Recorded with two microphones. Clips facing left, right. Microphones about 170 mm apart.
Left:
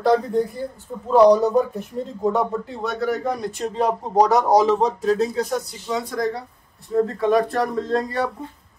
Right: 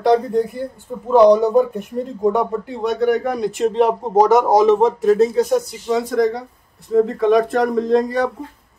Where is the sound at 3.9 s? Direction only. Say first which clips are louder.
Right 4 dB; 20° right (ahead or behind).